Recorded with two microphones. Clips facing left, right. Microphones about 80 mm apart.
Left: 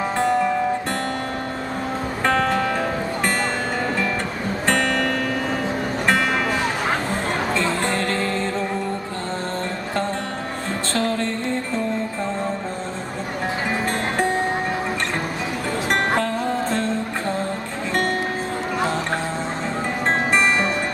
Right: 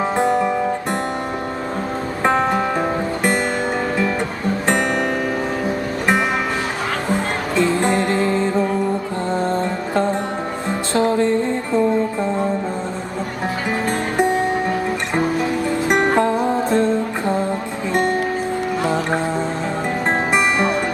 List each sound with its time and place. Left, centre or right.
0.2 s music: centre
2.2 s music: right
4.6 s music: centre
7.5 s music: centre
9.9 s music: centre
15.9 s music: centre
20.3 s music: centre